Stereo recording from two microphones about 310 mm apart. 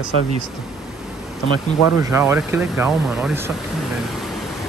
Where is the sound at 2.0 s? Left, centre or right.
Centre.